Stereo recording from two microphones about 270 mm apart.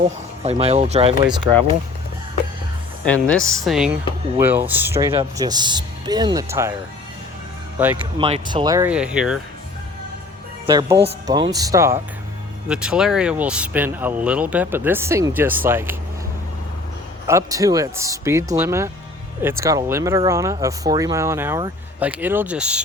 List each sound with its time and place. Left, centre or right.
0.0 s speech: right
3.0 s speech: centre
7.8 s speech: centre
8.2 s speech: centre
10.7 s speech: centre
17.2 s speech: centre